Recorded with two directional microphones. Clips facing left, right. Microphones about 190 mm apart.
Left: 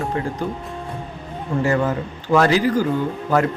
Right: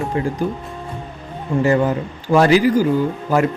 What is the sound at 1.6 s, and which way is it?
Speech, 15° right (ahead or behind).